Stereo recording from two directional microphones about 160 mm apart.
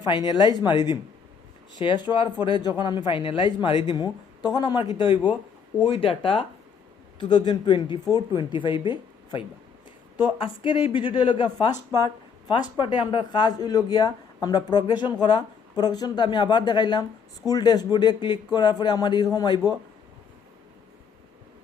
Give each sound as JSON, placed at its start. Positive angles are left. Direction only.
{"t": 0.3, "sound": "speech", "side_deg": 25}
{"t": 5.1, "sound": "speech", "side_deg": -10}
{"t": 5.8, "sound": "speech", "side_deg": 35}
{"t": 10.4, "sound": "speech", "side_deg": 30}